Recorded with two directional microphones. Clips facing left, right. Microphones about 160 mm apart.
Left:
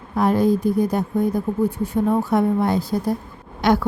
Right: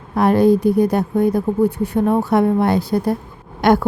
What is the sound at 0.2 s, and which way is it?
A woman's voice, 70° right (ahead or behind).